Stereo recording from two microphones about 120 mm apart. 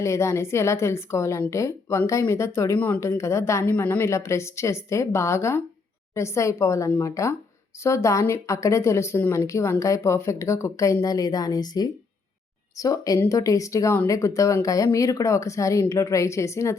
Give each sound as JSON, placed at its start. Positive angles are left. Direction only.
{"t": 0.0, "sound": "speech", "side_deg": 25}
{"t": 2.7, "sound": "a woman's voice", "side_deg": 15}